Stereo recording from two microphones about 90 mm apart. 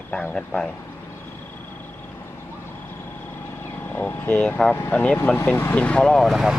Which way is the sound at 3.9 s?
20° left (ahead or behind).